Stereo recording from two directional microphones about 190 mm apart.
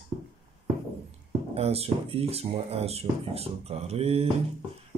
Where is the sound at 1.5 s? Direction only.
30° right (ahead or behind).